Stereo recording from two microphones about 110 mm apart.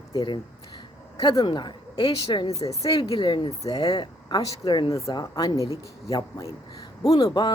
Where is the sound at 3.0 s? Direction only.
50° left (ahead or behind); by 6.5 s 30° left (ahead or behind).